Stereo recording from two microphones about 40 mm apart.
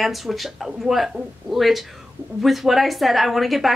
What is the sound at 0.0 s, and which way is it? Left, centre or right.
A woman's voice, centre.